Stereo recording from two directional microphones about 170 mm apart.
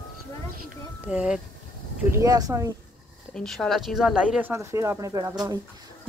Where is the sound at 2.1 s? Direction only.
20° right (ahead or behind).